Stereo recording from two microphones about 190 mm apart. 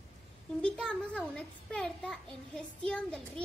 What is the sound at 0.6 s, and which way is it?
A child's voice, 5° left (ahead or behind).